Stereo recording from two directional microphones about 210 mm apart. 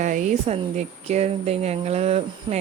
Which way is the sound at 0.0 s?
35° right (ahead or behind).